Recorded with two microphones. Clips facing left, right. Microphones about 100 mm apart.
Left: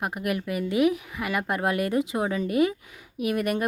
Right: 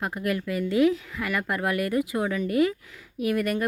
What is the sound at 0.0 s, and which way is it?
Speech, 20° left (ahead or behind).